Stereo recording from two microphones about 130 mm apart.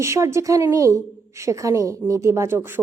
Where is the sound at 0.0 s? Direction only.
20° right (ahead or behind).